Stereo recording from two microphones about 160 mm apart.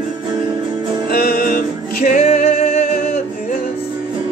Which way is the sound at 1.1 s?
70° left (ahead or behind).